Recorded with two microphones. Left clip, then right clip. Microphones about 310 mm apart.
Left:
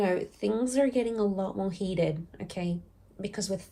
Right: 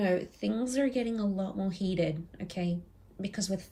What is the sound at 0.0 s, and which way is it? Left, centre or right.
Speech, centre.